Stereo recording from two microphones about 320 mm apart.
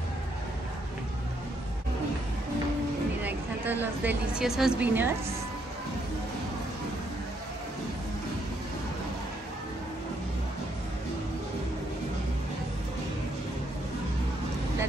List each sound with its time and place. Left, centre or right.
3.3 s a woman's voice: centre